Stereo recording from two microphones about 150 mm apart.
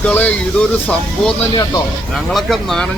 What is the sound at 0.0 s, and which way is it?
Speech, 10° left (ahead or behind).